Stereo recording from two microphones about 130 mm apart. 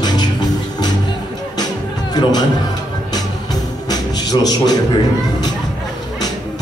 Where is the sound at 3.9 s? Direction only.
30° left (ahead or behind).